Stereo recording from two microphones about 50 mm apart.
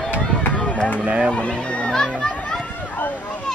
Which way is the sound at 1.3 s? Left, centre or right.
Centre.